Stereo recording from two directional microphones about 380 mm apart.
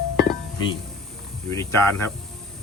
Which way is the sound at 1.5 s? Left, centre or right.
Centre.